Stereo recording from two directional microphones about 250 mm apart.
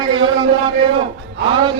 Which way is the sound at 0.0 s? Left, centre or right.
Centre.